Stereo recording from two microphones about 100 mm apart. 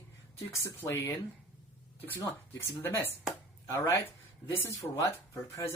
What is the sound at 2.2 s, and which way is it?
Speech, 25° left (ahead or behind).